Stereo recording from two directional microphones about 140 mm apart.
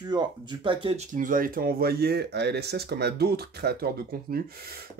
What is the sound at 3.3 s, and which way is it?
Speech, 90° right.